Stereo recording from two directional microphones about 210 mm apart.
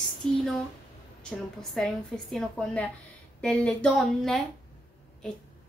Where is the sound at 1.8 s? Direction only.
Centre (ahead or behind).